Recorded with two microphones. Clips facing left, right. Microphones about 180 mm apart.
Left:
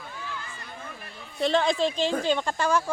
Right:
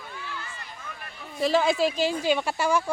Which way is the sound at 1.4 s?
5° right (ahead or behind).